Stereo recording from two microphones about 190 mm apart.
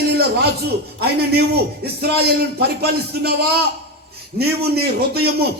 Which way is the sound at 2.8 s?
55° right (ahead or behind).